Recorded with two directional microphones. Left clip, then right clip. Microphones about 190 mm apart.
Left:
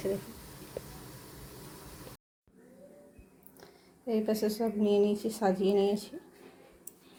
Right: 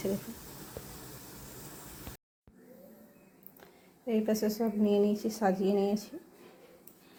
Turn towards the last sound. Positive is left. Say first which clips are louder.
# left 2 dB
turn(degrees=0)  # may be behind; listen again after turning